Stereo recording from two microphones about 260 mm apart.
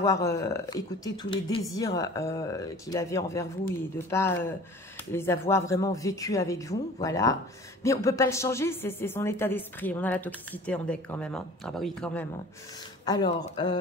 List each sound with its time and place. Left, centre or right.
0.0 s a woman's voice: centre
13.0 s a woman's voice: centre